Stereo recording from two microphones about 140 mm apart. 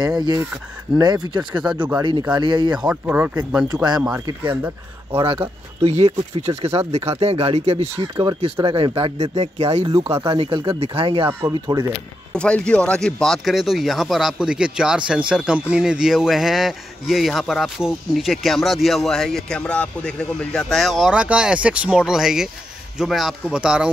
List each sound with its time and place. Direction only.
0.2 s speech: 25° right (ahead or behind)
1.6 s speech: 5° right (ahead or behind)
2.0 s speech: 30° right (ahead or behind)
2.7 s speech: 5° right (ahead or behind)
3.6 s speech: 30° right (ahead or behind)
5.1 s speech: 40° right (ahead or behind)
7.9 s speech: 20° right (ahead or behind)
8.6 s speech: 35° right (ahead or behind)
9.8 s speech: 20° right (ahead or behind)
10.3 s speech: 35° right (ahead or behind)
11.2 s speech: 20° right (ahead or behind)
12.3 s speech: 5° left (ahead or behind)